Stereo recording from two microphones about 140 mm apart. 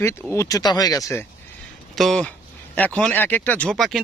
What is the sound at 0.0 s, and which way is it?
Speech, 20° left (ahead or behind).